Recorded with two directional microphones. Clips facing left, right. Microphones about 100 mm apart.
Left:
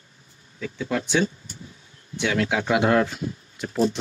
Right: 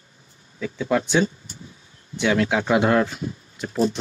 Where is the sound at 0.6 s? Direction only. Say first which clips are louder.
Right 5 dB; 25° right (ahead or behind).